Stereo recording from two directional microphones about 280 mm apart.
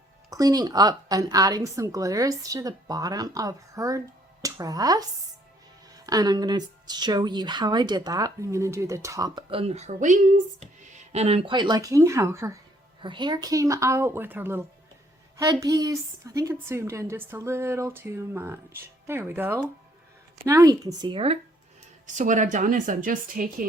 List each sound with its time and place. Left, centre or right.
0.3 s speech: centre
6.1 s speech: centre; by 23.6 s right